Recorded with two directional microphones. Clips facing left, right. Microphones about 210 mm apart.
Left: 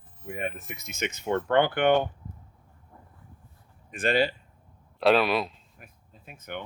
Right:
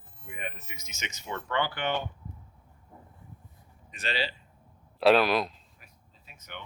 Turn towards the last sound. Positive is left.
turn(degrees=50)  # may be behind; listen again after turning